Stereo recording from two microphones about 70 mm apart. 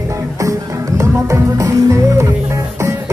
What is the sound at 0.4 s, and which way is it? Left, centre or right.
Music, right.